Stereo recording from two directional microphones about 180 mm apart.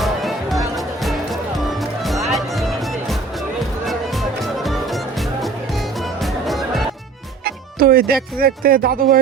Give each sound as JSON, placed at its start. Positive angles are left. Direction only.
{"t": 0.0, "sound": "music", "side_deg": 0}
{"t": 7.4, "sound": "speech", "side_deg": -55}